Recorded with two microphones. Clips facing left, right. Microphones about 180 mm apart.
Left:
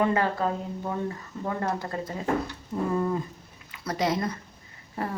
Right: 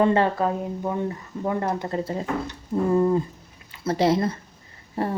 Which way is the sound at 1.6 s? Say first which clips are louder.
Right 4 dB; 20° right (ahead or behind).